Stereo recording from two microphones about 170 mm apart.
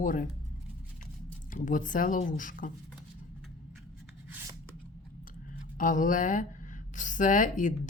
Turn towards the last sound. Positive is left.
turn(degrees=50)  # may be behind; listen again after turning